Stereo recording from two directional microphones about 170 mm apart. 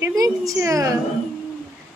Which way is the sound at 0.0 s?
20° right (ahead or behind).